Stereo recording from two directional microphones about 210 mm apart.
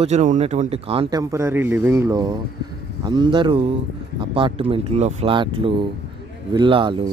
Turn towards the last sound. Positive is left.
turn(degrees=-25)  # may be behind; listen again after turning